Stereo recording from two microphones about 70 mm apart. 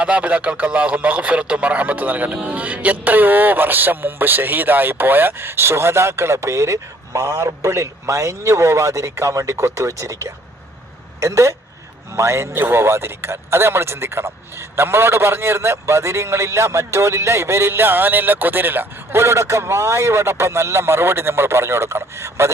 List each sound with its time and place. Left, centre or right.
0.0 s a man's voice: centre; by 22.5 s right